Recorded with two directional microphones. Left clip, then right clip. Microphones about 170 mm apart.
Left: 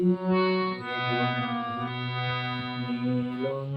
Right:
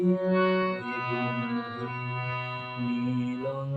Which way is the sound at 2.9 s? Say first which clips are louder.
Even; 35° left (ahead or behind).